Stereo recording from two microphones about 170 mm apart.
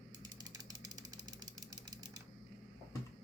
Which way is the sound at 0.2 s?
20° right (ahead or behind).